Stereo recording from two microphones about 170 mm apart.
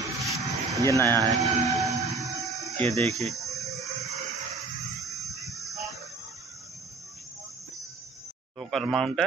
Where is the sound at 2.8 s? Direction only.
40° right (ahead or behind).